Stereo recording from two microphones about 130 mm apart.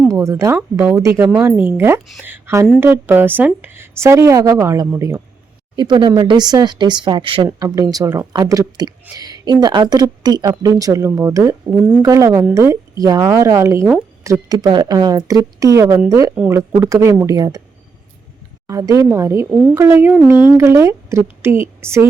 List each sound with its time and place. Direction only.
0.1 s a woman's voice: 25° right (ahead or behind)
1.3 s a woman's voice: 10° right (ahead or behind)
5.7 s a woman's voice: 35° right (ahead or behind)
7.4 s a woman's voice: 25° right (ahead or behind)
11.7 s a woman's voice: 10° right (ahead or behind)
12.0 s a woman's voice: 25° right (ahead or behind)
18.7 s a woman's voice: 25° right (ahead or behind)
19.5 s speech: 5° right (ahead or behind)
19.8 s a woman's voice: 20° right (ahead or behind)